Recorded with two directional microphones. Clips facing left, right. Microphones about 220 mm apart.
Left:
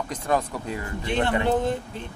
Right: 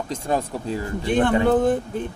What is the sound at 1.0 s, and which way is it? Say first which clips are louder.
Speech: right 5 dB; 50° right (ahead or behind).